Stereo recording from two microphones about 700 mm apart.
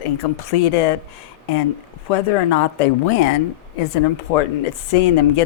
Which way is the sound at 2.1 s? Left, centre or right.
Left.